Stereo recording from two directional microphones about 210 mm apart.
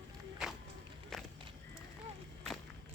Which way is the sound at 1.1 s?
Centre (ahead or behind).